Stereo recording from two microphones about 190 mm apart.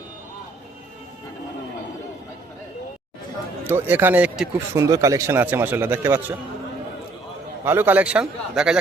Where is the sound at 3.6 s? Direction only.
10° right (ahead or behind).